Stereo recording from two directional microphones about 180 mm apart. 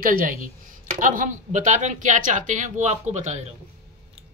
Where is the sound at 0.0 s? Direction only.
50° right (ahead or behind).